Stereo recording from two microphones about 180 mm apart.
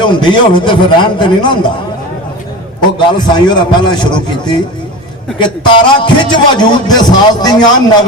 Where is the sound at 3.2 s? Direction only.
25° left (ahead or behind).